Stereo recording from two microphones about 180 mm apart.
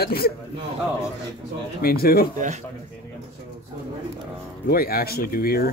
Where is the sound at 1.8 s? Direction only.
55° left (ahead or behind).